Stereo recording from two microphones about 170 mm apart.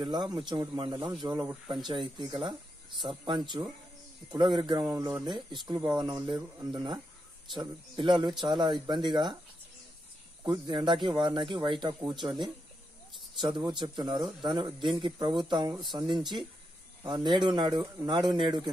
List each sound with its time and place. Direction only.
0.0 s speech: 25° right (ahead or behind)
10.4 s speech: 25° right (ahead or behind)